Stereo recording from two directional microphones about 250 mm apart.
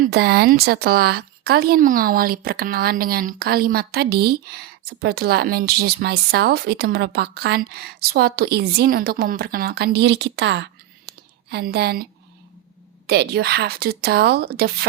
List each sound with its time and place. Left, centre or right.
0.0 s a woman's voice: right
13.1 s a woman's voice: right